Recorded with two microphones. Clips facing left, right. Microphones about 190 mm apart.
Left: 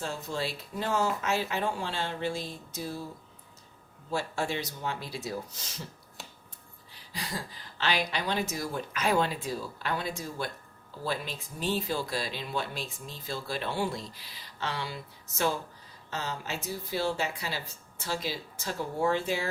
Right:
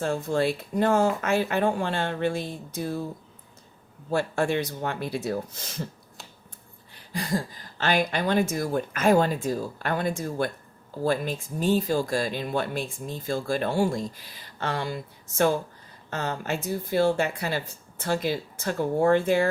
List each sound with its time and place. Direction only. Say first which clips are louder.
0.0 s speech: right 9 dB; 55° right (ahead or behind)
4.1 s speech: right 7 dB; 55° right (ahead or behind)
6.9 s speech: right 10 dB; 50° right (ahead or behind)